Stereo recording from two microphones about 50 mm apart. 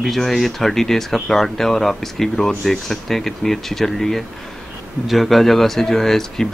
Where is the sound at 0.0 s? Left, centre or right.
Centre.